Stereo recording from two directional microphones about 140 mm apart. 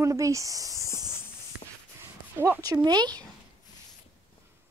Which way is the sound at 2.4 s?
20° right (ahead or behind).